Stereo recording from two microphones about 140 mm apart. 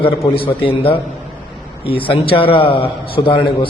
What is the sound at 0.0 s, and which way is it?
A man's voice, 40° left (ahead or behind).